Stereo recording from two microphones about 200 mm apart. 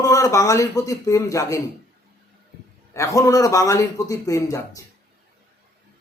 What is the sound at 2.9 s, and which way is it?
Speech, 15° left (ahead or behind).